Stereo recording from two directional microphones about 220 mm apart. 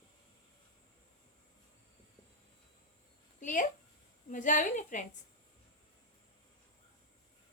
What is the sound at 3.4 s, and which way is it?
A woman's voice, 35° left (ahead or behind).